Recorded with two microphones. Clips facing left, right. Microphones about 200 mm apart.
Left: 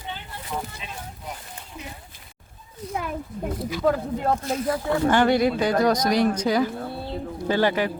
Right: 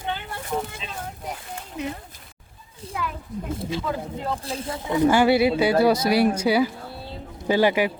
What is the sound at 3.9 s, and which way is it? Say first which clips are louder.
Speech: left 11 dB; 55° left (ahead or behind).